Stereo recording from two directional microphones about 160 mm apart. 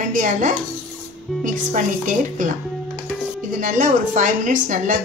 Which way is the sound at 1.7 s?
50° right (ahead or behind).